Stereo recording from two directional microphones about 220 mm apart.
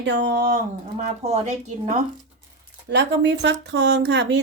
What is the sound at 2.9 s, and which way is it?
Speech, 50° right (ahead or behind).